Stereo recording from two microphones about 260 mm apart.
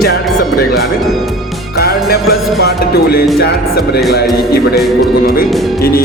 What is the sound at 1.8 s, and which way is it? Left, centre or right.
Music, left.